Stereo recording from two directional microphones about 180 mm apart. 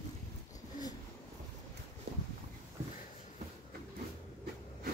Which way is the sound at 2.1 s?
65° right (ahead or behind).